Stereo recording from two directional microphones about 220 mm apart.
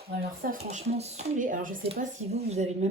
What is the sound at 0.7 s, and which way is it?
Speech, 30° right (ahead or behind).